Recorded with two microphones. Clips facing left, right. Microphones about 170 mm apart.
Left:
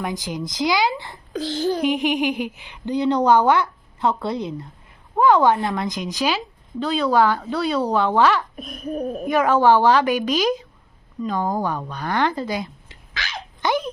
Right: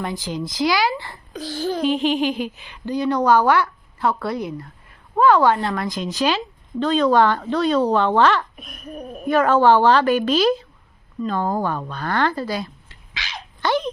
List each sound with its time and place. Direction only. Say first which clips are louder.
0.0 s a woman's voice: right 1 dB; 15° left (ahead or behind)
8.5 s laughter: left 7 dB; 40° left (ahead or behind)
9.2 s a woman's voice: right 2 dB; 15° left (ahead or behind)